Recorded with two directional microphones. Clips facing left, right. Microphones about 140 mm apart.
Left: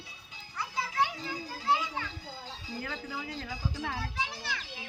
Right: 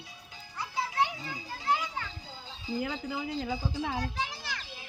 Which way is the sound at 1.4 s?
Centre (ahead or behind).